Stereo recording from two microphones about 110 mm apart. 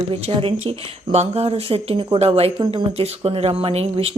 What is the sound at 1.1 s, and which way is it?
Speech, 75° right (ahead or behind).